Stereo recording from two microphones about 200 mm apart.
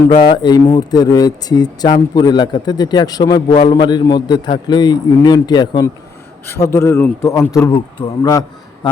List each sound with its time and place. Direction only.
0.2 s a man's voice: 20° left (ahead or behind)